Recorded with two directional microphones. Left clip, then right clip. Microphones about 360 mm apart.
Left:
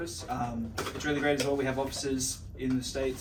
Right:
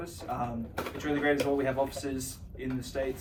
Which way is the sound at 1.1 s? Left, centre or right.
Centre.